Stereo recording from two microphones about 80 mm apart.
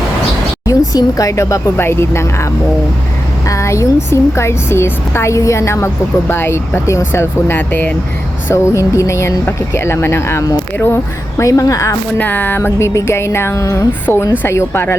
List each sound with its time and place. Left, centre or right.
0.6 s a woman's voice: left
3.5 s a woman's voice: left
8.4 s a woman's voice: left
11.3 s a woman's voice: left
12.1 s a woman's voice: left